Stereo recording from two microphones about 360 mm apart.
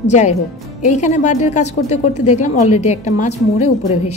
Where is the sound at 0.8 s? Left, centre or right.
Centre.